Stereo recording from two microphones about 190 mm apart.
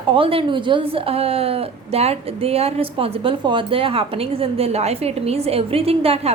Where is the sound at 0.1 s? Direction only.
30° right (ahead or behind).